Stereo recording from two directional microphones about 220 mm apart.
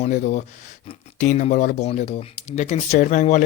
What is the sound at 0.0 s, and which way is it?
Speech, 30° left (ahead or behind).